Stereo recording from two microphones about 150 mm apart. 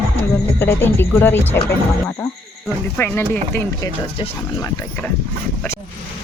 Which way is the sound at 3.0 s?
15° left (ahead or behind).